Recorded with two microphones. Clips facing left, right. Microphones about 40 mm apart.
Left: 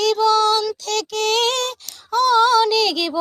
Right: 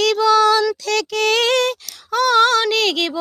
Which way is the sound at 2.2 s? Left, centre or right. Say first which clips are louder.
Even; right.